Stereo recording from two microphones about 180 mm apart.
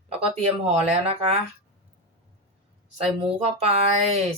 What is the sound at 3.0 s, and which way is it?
Speech, 35° right (ahead or behind).